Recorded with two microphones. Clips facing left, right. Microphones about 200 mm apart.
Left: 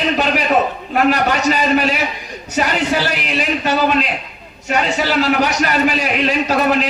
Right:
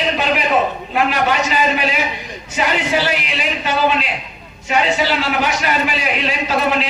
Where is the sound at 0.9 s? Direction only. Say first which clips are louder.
Left 2 dB; 45° left (ahead or behind).